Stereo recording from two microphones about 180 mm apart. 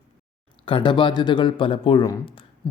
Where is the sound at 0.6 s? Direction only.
30° left (ahead or behind).